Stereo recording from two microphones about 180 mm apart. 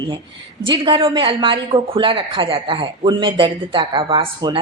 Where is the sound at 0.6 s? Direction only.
30° right (ahead or behind).